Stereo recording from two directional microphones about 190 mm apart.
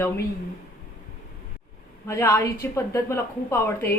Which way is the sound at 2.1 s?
15° left (ahead or behind).